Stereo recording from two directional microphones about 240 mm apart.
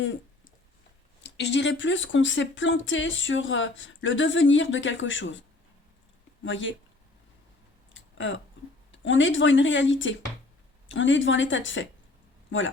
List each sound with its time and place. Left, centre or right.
1.2 s speech: left
6.4 s speech: left
7.9 s a sound: left
8.9 s speech: left